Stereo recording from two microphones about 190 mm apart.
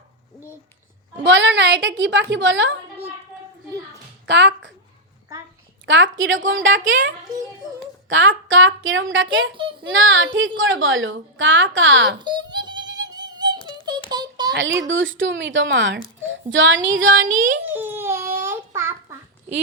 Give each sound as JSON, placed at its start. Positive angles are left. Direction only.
{"t": 1.2, "sound": "a woman's voice", "side_deg": -70}
{"t": 4.3, "sound": "a woman's voice", "side_deg": -70}
{"t": 5.8, "sound": "a woman's voice", "side_deg": -80}
{"t": 8.1, "sound": "a woman's voice", "side_deg": -80}
{"t": 12.2, "sound": "music", "side_deg": -25}
{"t": 14.1, "sound": "a sound", "side_deg": -20}
{"t": 14.8, "sound": "a woman's voice", "side_deg": -90}
{"t": 16.5, "sound": "a woman's voice", "side_deg": -80}
{"t": 17.2, "sound": "a child's voice", "side_deg": -45}
{"t": 17.7, "sound": "child singing", "side_deg": -10}